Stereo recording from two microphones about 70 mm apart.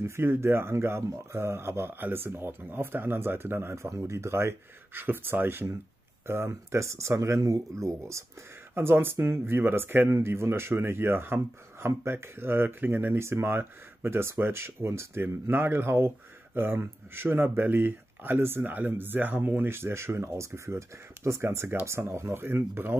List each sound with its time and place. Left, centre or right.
0.0 s speech: right
8.7 s speech: right